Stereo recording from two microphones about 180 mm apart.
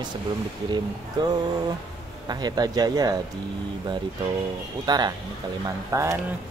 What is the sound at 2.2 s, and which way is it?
Speech, 20° right (ahead or behind).